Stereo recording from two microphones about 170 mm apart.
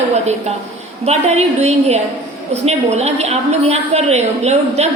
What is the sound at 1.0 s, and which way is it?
A woman's voice, 40° right (ahead or behind).